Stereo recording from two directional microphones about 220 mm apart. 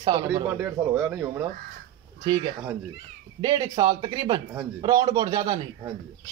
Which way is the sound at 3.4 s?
20° right (ahead or behind).